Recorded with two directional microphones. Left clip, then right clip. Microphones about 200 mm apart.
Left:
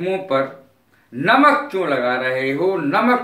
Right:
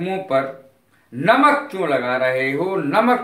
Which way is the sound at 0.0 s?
25° right (ahead or behind).